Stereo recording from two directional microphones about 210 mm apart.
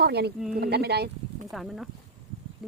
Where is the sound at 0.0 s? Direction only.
50° right (ahead or behind).